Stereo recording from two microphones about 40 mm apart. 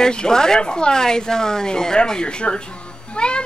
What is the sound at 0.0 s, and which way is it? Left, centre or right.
Speech, centre.